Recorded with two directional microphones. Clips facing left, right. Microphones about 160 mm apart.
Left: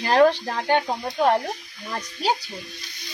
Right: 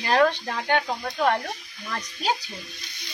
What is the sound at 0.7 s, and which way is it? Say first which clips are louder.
Speech: left 2 dB; 20° left (ahead or behind).